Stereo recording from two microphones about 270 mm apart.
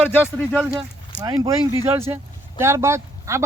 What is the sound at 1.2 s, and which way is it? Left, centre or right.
Speech, centre.